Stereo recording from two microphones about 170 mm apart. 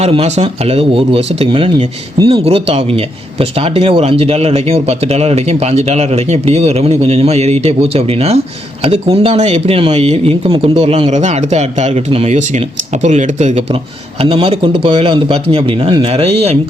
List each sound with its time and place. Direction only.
0.0 s speech: 40° right (ahead or behind)
14.2 s speech: 35° right (ahead or behind)